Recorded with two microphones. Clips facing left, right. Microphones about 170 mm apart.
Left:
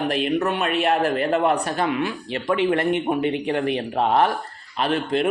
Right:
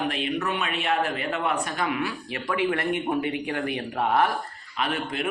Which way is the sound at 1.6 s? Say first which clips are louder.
Left 5 dB; 30° left (ahead or behind).